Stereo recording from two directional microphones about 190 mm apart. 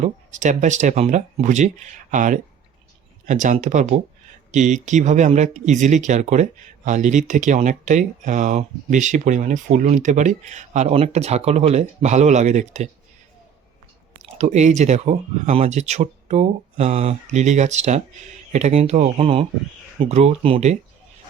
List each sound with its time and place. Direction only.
0.0 s speech: 40° right (ahead or behind)
14.3 s speech: 35° right (ahead or behind)